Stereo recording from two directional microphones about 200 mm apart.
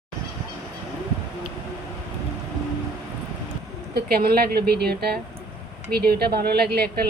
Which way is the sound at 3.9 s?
50° right (ahead or behind).